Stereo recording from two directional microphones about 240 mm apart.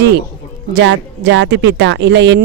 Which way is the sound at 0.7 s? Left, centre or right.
Right.